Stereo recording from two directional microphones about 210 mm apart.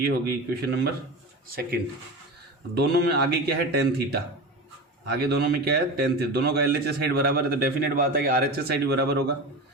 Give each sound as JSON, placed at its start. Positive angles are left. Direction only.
{"t": 0.0, "sound": "a man's voice", "side_deg": -50}
{"t": 2.7, "sound": "a man's voice", "side_deg": -50}
{"t": 5.2, "sound": "a man's voice", "side_deg": -50}